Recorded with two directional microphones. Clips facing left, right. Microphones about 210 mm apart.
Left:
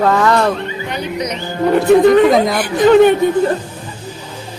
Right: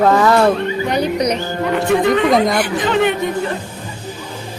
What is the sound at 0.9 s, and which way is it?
Speech, 35° right (ahead or behind).